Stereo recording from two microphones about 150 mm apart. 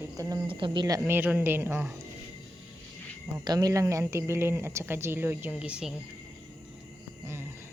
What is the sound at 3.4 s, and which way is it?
Speech, 25° right (ahead or behind).